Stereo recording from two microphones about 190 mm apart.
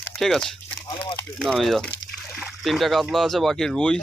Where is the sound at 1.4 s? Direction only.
Centre (ahead or behind).